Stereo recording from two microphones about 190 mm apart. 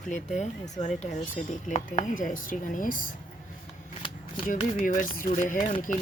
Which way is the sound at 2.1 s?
45° left (ahead or behind).